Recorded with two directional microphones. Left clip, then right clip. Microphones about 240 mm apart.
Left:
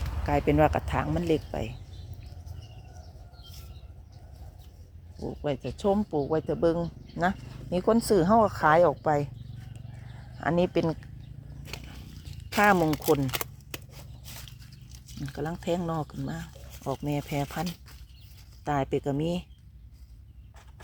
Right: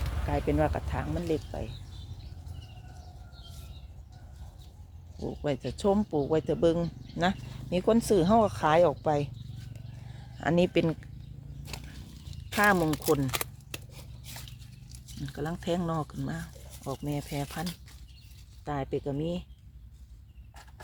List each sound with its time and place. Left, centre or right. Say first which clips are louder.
0.3 s speech: left 5 dB; left
5.2 s speech: left 1 dB; centre
10.4 s speech: even; centre
12.5 s speech: left 2 dB; centre
15.3 s speech: left 2 dB; centre